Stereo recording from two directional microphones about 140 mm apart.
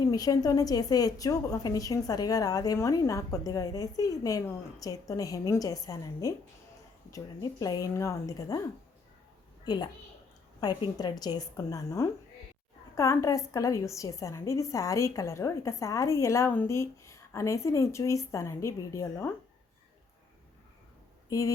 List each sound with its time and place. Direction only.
0.0 s a woman's voice: 25° left (ahead or behind)
9.6 s a woman's voice: 30° left (ahead or behind)
21.2 s speech: 25° left (ahead or behind)